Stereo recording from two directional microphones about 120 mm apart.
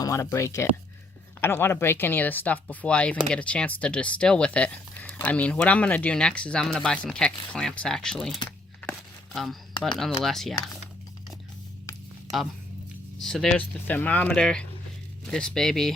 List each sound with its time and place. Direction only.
0.0 s speech: 25° left (ahead or behind); by 8.4 s 5° left (ahead or behind)
8.9 s chopping: centre (ahead or behind)
10.2 s speech: centre (ahead or behind)
13.2 s speech: 5° left (ahead or behind)